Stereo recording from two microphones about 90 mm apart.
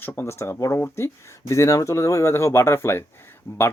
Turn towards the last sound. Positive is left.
turn(degrees=25)  # may be behind; listen again after turning